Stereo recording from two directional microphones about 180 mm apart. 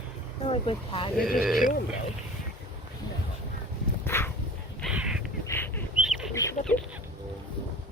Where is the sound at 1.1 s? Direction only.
Centre (ahead or behind).